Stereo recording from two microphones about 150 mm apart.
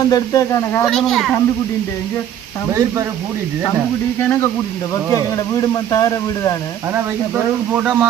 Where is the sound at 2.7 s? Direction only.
20° right (ahead or behind).